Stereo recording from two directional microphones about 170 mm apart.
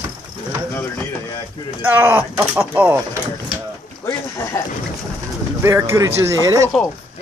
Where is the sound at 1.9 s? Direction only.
10° right (ahead or behind).